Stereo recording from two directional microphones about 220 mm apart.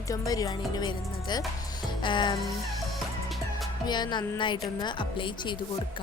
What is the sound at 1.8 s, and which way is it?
Speech, 20° left (ahead or behind).